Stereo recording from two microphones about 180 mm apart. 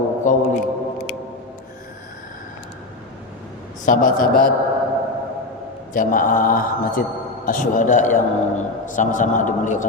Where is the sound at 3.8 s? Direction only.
45° left (ahead or behind).